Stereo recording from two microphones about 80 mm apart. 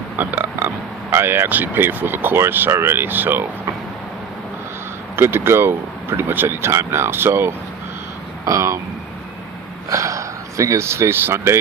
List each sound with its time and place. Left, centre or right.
0.2 s a sound: right
1.1 s speech: right
5.1 s speech: right
8.4 s speech: right
9.9 s speech: right